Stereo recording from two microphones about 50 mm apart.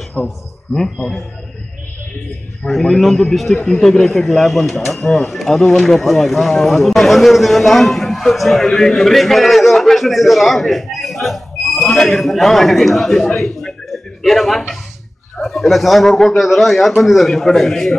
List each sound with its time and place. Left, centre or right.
0.2 s speech: left
2.6 s a man's voice: centre